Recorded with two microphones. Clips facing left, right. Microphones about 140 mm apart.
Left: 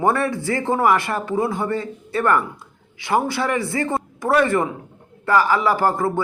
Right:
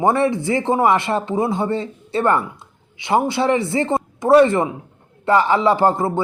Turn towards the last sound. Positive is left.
turn(degrees=-25)  # may be behind; listen again after turning